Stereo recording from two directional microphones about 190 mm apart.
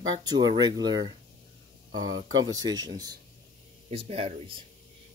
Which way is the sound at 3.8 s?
30° right (ahead or behind).